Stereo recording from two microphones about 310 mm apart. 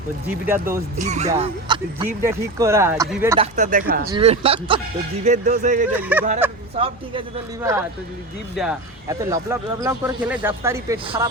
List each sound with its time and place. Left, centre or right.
0.9 s speech: right
3.3 s speech: right
5.9 s speech: centre
6.7 s speech: centre